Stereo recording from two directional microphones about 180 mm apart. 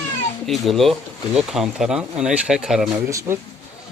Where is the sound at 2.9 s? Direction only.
15° right (ahead or behind).